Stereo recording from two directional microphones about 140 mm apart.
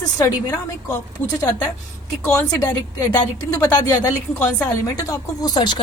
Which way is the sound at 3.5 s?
25° left (ahead or behind).